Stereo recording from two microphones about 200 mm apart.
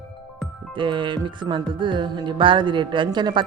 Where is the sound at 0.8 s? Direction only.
25° right (ahead or behind).